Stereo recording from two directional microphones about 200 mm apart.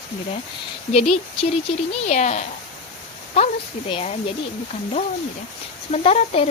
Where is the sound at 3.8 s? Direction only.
30° left (ahead or behind).